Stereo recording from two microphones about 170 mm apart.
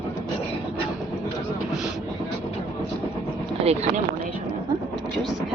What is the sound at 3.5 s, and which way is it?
Speech, 35° right (ahead or behind).